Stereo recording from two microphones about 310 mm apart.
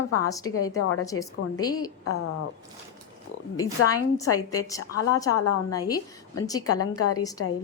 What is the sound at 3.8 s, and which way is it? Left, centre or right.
Speech, centre.